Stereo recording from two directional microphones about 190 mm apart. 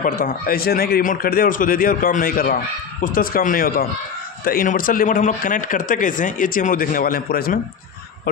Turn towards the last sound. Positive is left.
turn(degrees=50)  # may be behind; listen again after turning